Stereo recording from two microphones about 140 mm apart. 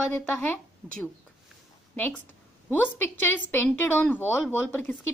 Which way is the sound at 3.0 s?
15° left (ahead or behind).